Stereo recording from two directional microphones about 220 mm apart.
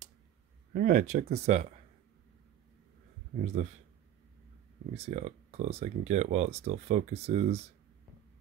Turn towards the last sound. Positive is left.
turn(degrees=-30)  # may be behind; listen again after turning